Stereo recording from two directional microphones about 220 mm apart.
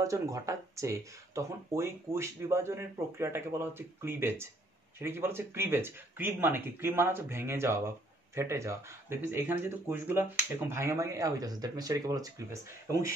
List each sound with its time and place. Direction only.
0.0 s speech: 15° right (ahead or behind)